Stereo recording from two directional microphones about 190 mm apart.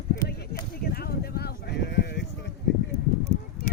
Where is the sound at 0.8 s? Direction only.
55° left (ahead or behind).